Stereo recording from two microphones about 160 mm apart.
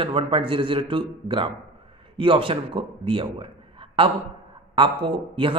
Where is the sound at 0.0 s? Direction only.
35° right (ahead or behind).